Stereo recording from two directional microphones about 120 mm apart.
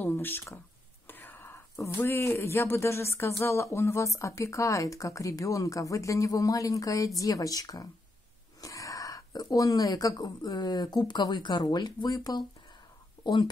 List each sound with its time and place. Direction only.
0.0 s speech: 15° left (ahead or behind); by 13.5 s 40° left (ahead or behind)